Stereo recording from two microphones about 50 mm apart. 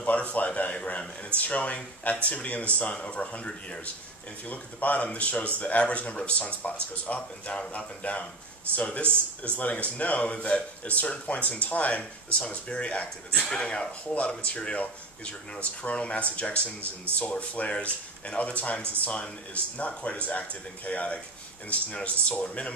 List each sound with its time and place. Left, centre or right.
0.0 s speech: left
13.4 s speech: centre
13.7 s speech: left